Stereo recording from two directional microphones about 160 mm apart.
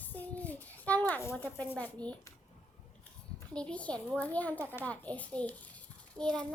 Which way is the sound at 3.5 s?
5° left (ahead or behind).